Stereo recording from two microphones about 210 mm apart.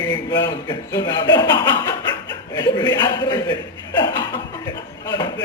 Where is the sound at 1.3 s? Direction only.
20° left (ahead or behind).